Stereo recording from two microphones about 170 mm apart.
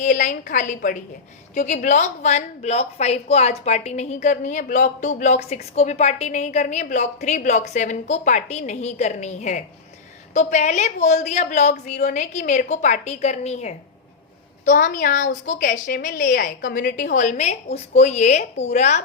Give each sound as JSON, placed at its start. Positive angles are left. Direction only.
{"t": 0.0, "sound": "a woman's voice", "side_deg": 50}
{"t": 16.3, "sound": "a woman's voice", "side_deg": 65}